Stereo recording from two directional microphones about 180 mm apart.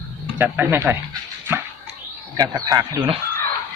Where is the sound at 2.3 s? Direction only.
20° right (ahead or behind).